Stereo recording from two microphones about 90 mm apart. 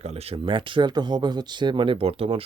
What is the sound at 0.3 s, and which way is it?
Speech, 70° right (ahead or behind).